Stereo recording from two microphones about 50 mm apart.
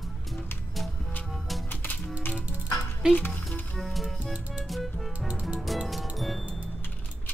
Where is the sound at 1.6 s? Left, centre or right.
Left.